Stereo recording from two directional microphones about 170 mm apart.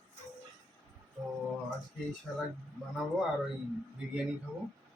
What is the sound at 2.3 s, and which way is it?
Speech, centre (ahead or behind).